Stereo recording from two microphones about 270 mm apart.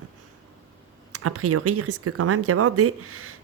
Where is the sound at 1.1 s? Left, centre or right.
Right.